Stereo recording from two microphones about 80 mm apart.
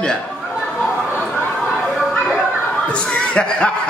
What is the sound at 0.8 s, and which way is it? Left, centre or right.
Chatter, centre.